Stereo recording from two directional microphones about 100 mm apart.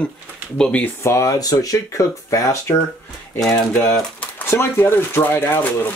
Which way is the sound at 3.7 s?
10° left (ahead or behind).